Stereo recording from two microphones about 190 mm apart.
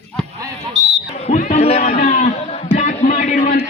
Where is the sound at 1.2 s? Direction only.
40° left (ahead or behind).